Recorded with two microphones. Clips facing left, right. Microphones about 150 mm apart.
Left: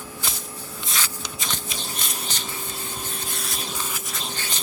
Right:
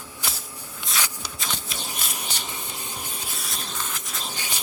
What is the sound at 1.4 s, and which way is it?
Shuffling cards, centre (ahead or behind).